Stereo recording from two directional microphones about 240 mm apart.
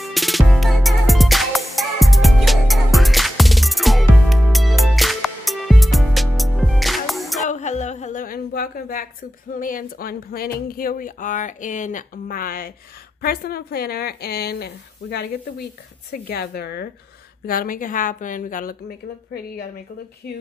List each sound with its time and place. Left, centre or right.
0.0 s music: centre
7.4 s a sound: left
9.6 s speech: left